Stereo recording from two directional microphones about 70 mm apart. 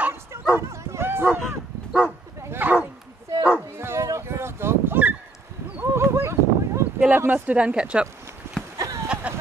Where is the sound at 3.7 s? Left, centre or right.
Right.